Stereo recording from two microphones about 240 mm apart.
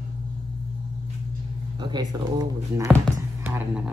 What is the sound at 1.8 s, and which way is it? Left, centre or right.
Speech, centre.